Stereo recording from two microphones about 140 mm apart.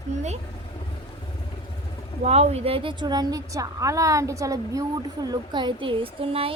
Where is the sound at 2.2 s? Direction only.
50° right (ahead or behind).